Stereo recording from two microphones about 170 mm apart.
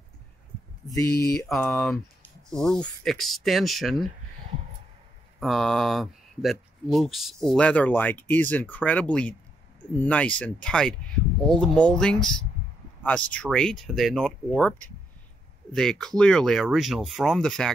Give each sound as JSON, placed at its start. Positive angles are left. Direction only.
{"t": 0.8, "sound": "speech", "side_deg": 20}
{"t": 1.7, "sound": "speech", "side_deg": 0}
{"t": 5.4, "sound": "speech", "side_deg": 0}